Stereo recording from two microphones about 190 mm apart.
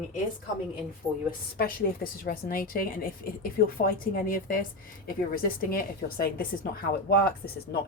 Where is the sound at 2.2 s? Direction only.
50° left (ahead or behind).